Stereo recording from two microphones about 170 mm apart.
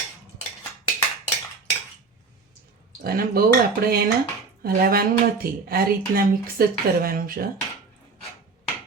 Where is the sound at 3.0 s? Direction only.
60° right (ahead or behind).